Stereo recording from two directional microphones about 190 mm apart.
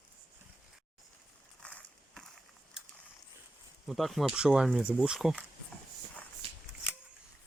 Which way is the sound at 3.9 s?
Centre (ahead or behind).